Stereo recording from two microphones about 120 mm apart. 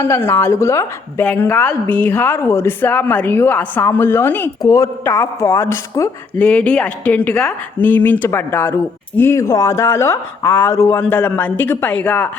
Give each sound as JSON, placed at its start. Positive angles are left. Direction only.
{"t": 0.0, "sound": "speech", "side_deg": 20}
{"t": 1.2, "sound": "a woman's voice", "side_deg": 15}
{"t": 6.4, "sound": "a woman's voice", "side_deg": 10}